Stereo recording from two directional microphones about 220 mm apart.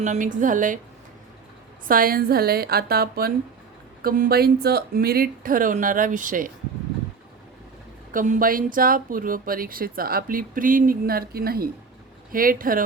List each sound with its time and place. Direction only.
0.0 s speech: 35° right (ahead or behind)
1.9 s a woman's voice: 40° right (ahead or behind)
8.1 s speech: 35° right (ahead or behind)